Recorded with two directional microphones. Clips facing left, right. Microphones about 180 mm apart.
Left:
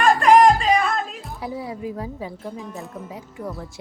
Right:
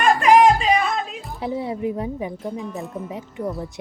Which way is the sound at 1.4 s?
25° right (ahead or behind).